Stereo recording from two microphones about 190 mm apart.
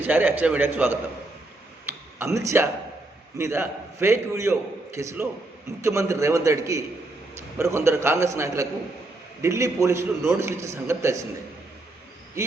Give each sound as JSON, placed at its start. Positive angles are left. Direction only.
{"t": 0.0, "sound": "a man's voice", "side_deg": -10}
{"t": 1.9, "sound": "a sound", "side_deg": -15}
{"t": 3.3, "sound": "a man's voice", "side_deg": -15}